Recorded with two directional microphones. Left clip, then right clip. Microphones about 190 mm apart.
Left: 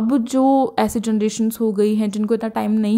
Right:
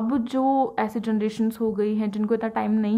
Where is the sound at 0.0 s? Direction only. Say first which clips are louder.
Left 6 dB; 40° left (ahead or behind).